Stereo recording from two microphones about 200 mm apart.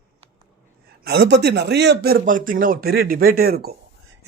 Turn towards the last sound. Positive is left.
turn(degrees=-50)  # may be behind; listen again after turning